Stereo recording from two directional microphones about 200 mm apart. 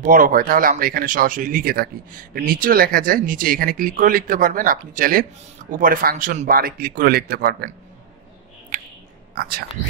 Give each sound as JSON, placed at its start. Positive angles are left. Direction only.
{"t": 0.0, "sound": "speech", "side_deg": -45}
{"t": 9.3, "sound": "speech", "side_deg": -50}